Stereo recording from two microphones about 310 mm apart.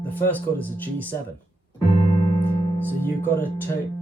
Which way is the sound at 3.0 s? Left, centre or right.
Centre.